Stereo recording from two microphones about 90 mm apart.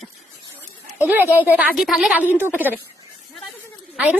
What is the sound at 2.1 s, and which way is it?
Speech, 20° right (ahead or behind).